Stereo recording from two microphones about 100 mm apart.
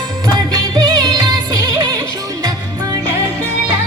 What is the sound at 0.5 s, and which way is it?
Music, 40° right (ahead or behind).